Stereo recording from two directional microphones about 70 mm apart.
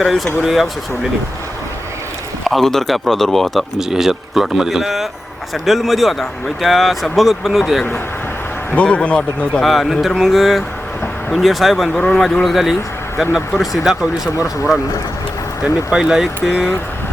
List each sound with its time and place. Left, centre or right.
0.4 s speech: centre
2.4 s speech: centre
8.7 s speech: centre
9.6 s speech: centre
14.3 s speech: left
15.6 s speech: centre